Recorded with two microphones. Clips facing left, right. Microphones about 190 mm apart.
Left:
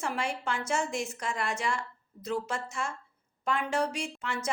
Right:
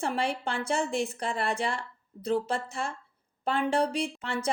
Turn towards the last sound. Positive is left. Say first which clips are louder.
# right 4 dB
turn(degrees=-35)  # may be behind; listen again after turning